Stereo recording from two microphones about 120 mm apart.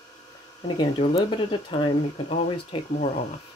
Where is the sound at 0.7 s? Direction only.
45° left (ahead or behind).